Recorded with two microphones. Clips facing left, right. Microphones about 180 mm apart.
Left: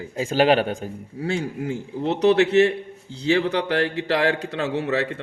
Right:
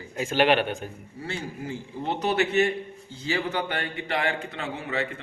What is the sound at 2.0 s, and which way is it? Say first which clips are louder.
A man's voice: left 8 dB; 90° left.